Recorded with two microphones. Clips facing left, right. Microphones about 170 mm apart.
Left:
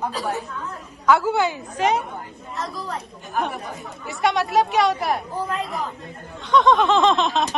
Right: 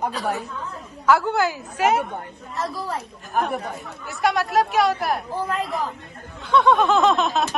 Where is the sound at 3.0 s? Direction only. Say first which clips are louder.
Right 1 dB; centre (ahead or behind).